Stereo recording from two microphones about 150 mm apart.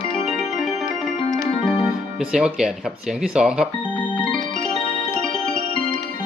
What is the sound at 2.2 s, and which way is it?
Speech, 5° right (ahead or behind).